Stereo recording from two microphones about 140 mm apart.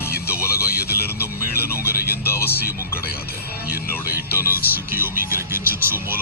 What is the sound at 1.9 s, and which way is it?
Music, 90° left.